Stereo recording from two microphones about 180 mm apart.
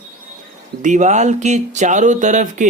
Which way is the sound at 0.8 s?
40° right (ahead or behind).